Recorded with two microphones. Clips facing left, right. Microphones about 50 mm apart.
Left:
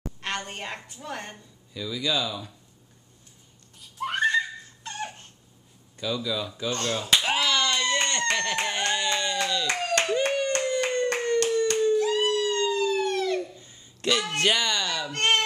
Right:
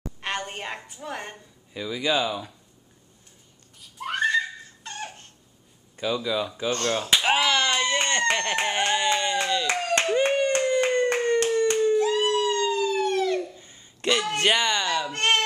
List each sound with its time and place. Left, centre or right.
0.2 s a woman's voice: centre
1.7 s speech: right
4.0 s giggle: centre
5.9 s a woman's voice: right
7.2 s a sound: right
8.5 s speech: right
9.9 s clapping: right
11.4 s hands: centre
12.0 s a sound: right
12.6 s police car: centre
13.4 s a sound: centre
14.3 s speech: centre